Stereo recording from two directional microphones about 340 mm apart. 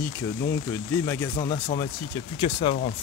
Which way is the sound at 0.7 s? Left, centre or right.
Centre.